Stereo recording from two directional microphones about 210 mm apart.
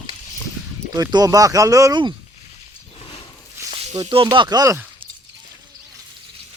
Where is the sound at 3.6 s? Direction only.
10° right (ahead or behind).